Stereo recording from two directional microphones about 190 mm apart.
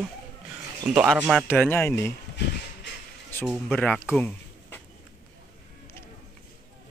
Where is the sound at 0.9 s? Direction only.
5° right (ahead or behind).